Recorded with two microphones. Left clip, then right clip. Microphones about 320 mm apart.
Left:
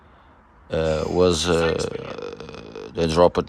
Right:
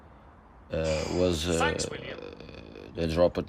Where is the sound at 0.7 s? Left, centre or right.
Centre.